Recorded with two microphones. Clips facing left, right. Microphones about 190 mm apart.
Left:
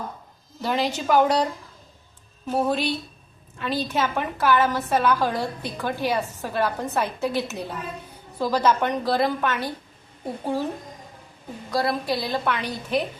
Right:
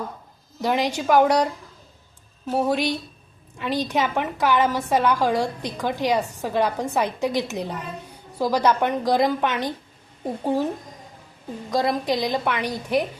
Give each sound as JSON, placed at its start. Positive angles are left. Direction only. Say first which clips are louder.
{"t": 0.6, "sound": "a woman's voice", "louder": "right 2 dB", "side_deg": -10}
{"t": 2.5, "sound": "a woman's voice", "louder": "right 1 dB", "side_deg": -10}
{"t": 11.7, "sound": "a woman's voice", "louder": "right 2 dB", "side_deg": -20}